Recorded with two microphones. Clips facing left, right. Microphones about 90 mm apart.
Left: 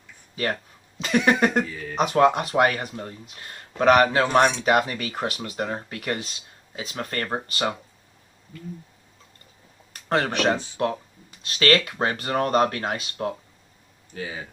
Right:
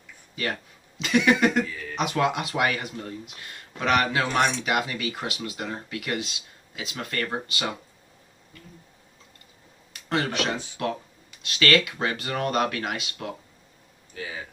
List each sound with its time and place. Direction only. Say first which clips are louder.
1.0 s speech: even; 40° left (ahead or behind)
9.9 s speech: left 3 dB; 40° left (ahead or behind)